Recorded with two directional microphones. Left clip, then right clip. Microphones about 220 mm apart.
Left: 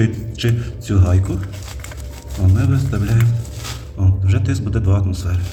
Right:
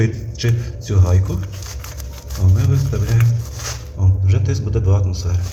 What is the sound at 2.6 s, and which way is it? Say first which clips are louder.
Speech: left 2 dB; 20° left (ahead or behind).